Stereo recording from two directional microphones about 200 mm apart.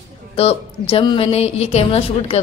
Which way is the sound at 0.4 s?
30° left (ahead or behind).